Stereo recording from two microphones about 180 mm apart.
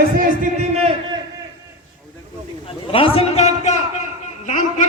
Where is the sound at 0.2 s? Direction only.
45° right (ahead or behind).